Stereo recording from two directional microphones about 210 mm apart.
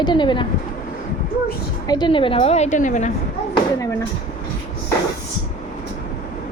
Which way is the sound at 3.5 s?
15° left (ahead or behind).